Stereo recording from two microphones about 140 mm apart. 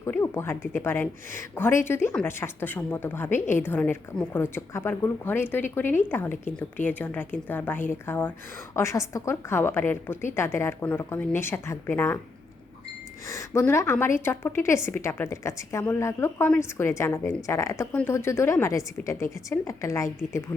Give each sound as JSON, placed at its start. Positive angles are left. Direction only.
{"t": 0.0, "sound": "a woman's voice", "side_deg": 15}
{"t": 13.2, "sound": "a woman's voice", "side_deg": 20}